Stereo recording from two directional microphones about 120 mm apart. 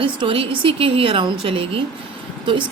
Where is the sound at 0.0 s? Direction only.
45° right (ahead or behind).